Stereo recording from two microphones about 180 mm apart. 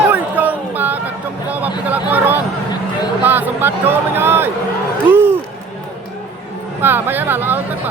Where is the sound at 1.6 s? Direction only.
10° right (ahead or behind).